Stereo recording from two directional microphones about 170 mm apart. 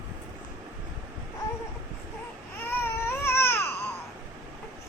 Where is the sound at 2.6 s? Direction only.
15° left (ahead or behind).